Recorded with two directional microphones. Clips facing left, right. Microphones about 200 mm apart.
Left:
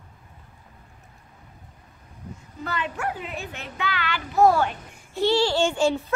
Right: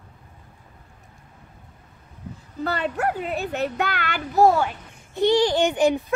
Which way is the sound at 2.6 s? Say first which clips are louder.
Right 5 dB; 35° right (ahead or behind).